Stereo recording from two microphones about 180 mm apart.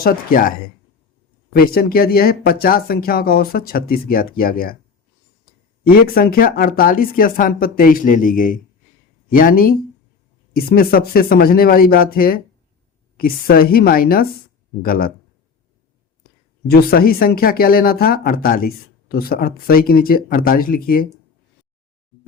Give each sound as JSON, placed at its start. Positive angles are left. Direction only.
{"t": 0.0, "sound": "speech", "side_deg": 50}
{"t": 1.5, "sound": "speech", "side_deg": 55}
{"t": 5.8, "sound": "speech", "side_deg": 55}
{"t": 16.6, "sound": "speech", "side_deg": 60}